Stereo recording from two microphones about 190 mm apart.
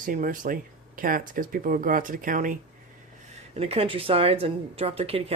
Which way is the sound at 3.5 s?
30° right (ahead or behind).